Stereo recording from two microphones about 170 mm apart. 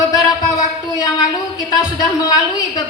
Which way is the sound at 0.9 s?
25° left (ahead or behind).